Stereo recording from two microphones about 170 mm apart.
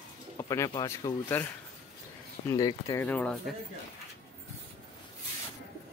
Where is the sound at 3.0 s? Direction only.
10° left (ahead or behind).